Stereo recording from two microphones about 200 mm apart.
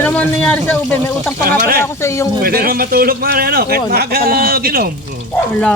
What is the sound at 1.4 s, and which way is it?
Speech, 45° right (ahead or behind).